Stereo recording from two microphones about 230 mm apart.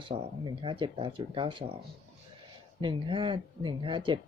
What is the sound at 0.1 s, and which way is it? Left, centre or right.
Speech, right.